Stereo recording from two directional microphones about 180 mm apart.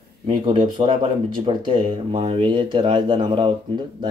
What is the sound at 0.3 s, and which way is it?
Speech, 25° right (ahead or behind).